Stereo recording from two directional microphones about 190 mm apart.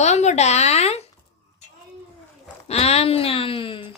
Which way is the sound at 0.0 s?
35° left (ahead or behind).